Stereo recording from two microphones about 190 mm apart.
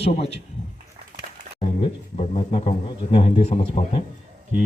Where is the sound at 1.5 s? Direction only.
30° left (ahead or behind).